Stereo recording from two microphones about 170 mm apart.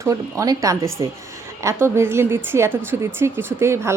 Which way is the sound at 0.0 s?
20° right (ahead or behind).